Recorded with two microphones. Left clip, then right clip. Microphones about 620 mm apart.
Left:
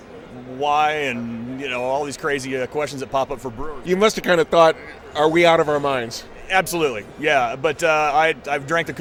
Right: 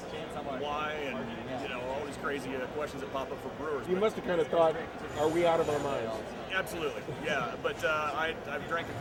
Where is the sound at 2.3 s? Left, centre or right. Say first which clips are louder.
Left 12 dB; left.